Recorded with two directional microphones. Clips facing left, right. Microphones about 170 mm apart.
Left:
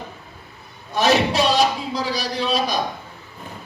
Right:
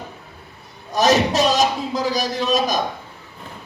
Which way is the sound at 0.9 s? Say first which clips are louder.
Right 1 dB; 40° right (ahead or behind).